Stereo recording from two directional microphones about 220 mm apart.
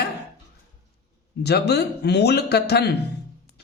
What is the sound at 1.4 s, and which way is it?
Speech, 50° left (ahead or behind).